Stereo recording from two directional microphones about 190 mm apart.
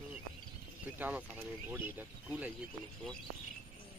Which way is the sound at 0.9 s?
10° right (ahead or behind).